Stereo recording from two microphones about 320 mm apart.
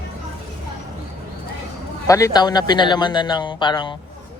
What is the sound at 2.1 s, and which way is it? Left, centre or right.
A man's voice, centre.